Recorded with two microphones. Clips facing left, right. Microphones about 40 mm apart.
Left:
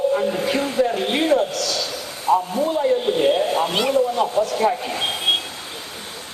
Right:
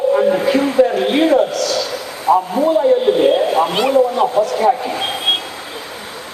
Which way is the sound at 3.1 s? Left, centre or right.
Right.